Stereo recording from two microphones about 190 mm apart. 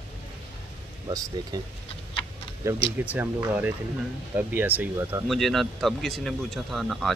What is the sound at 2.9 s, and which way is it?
Speech, 10° right (ahead or behind).